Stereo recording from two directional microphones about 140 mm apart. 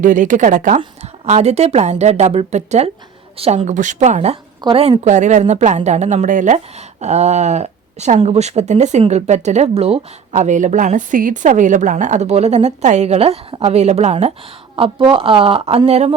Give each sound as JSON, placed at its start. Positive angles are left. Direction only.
{"t": 0.0, "sound": "speech", "side_deg": -65}
{"t": 1.0, "sound": "speech", "side_deg": -50}
{"t": 4.6, "sound": "speech", "side_deg": -45}